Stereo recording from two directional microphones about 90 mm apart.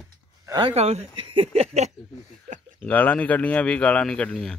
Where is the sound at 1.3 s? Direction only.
90° right.